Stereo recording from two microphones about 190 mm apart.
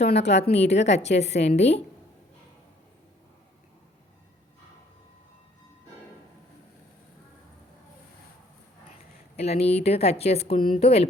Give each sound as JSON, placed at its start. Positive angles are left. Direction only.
{"t": 0.0, "sound": "a woman's voice", "side_deg": 35}
{"t": 8.9, "sound": "a woman's voice", "side_deg": 35}